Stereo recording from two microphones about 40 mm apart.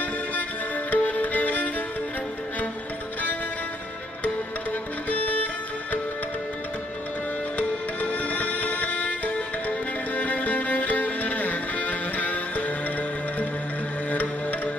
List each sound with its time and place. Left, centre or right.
0.0 s music: left
5.1 s music: left
7.5 s music: left
14.1 s music: left